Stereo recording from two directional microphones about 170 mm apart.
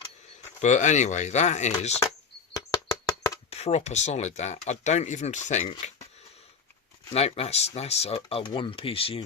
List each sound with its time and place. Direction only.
0.6 s speech: 45° left (ahead or behind)
2.5 s a sound: 20° left (ahead or behind)
3.5 s speech: 40° left (ahead or behind)
7.1 s speech: 35° left (ahead or behind)